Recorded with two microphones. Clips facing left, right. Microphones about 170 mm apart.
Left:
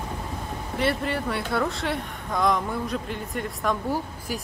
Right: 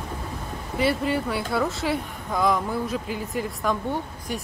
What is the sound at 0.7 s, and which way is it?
Speech, centre (ahead or behind).